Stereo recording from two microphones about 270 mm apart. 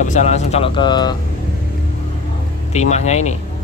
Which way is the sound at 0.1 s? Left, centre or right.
Left.